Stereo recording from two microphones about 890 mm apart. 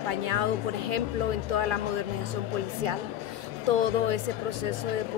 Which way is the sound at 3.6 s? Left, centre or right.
Right.